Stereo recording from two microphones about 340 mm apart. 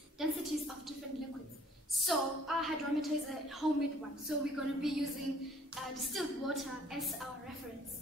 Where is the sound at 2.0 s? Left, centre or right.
Centre.